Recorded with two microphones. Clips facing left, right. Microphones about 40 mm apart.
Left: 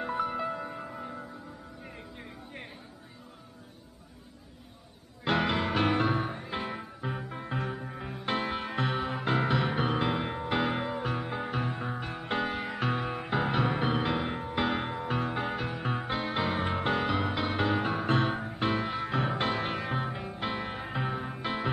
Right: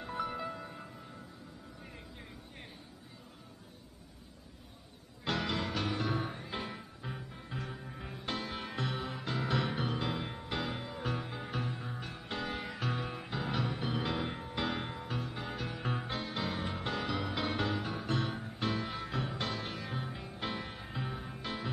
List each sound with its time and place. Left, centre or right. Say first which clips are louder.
0.0 s music: left 6 dB; left
0.9 s music: left 10 dB; left
1.9 s music: left 5 dB; left
5.2 s music: left 7 dB; left
6.1 s music: left 5 dB; centre
6.8 s music: left 8 dB; left
9.5 s music: left 6 dB; left
11.0 s music: left 6 dB; centre; by 14.0 s left
14.0 s music: left 6 dB; left
15.1 s music: left 8 dB; left; by 17.7 s centre
17.7 s music: left 8 dB; left
20.7 s music: left 8 dB; left